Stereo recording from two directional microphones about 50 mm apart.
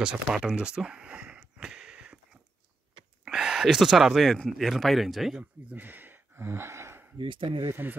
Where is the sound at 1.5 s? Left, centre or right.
Centre.